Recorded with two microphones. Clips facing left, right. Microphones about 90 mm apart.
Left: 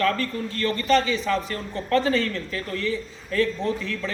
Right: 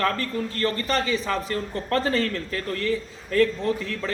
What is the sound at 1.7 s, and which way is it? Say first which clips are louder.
A woman's voice: left 3 dB; 45° right (ahead or behind).